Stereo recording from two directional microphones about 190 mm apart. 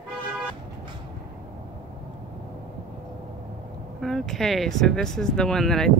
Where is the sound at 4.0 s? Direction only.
Centre (ahead or behind).